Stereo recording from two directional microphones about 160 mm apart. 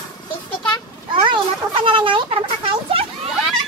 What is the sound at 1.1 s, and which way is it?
Speech, 30° right (ahead or behind).